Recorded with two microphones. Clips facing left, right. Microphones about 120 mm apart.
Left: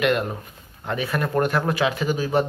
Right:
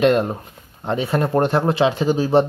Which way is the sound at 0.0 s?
30° right (ahead or behind).